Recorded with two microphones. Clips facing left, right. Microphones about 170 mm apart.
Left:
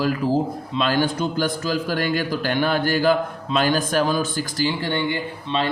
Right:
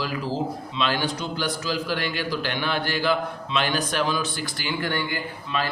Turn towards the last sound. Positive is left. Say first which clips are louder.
# left 4 dB
turn(degrees=25)  # may be behind; listen again after turning